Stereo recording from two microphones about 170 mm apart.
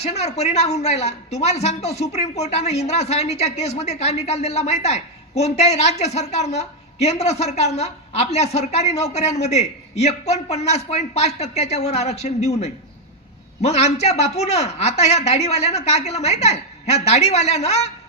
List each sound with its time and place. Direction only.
0.0 s a woman's voice: 40° left (ahead or behind)
13.6 s a woman's voice: 40° left (ahead or behind)